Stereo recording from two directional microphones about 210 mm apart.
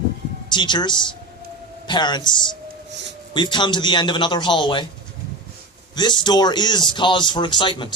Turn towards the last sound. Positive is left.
turn(degrees=20)  # may be behind; listen again after turning